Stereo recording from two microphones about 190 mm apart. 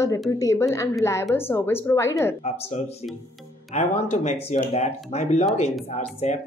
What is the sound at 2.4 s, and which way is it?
Speech, 35° left (ahead or behind).